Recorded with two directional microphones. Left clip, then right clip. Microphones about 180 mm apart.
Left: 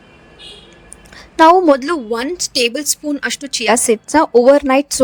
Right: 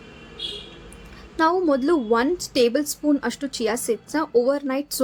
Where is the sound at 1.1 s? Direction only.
45° left (ahead or behind).